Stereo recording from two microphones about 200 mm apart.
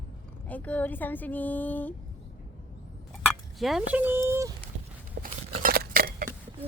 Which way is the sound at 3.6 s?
Centre (ahead or behind).